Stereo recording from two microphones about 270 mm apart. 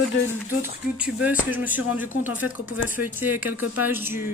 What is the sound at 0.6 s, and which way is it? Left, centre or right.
Speech, centre.